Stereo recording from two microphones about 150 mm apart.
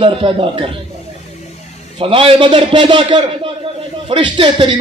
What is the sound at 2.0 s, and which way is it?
A man's voice, 35° right (ahead or behind).